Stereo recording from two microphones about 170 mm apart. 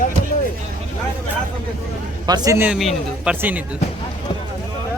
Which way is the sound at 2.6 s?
5° right (ahead or behind).